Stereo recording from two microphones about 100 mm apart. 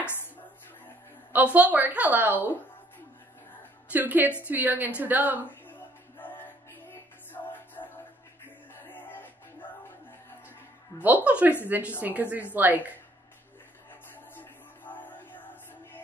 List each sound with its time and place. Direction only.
1.3 s a woman's voice: 15° right (ahead or behind)
3.9 s a woman's voice: 15° right (ahead or behind)
5.4 s music: 20° left (ahead or behind)
10.9 s speech: 25° left (ahead or behind)
11.2 s a woman's voice: 15° right (ahead or behind)
14.3 s music: 20° left (ahead or behind)